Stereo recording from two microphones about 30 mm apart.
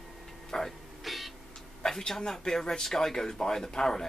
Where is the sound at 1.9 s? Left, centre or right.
Centre.